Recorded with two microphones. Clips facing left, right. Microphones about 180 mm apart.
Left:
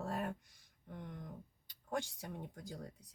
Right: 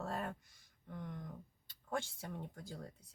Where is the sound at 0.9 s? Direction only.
20° left (ahead or behind).